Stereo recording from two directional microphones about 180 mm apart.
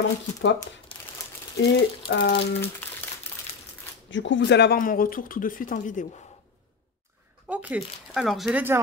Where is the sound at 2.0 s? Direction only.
70° left (ahead or behind).